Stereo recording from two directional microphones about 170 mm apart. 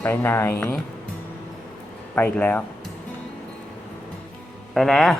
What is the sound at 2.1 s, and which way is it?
Speech, 10° left (ahead or behind).